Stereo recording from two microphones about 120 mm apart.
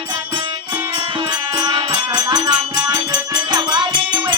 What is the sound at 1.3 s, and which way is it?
Music, 40° right (ahead or behind).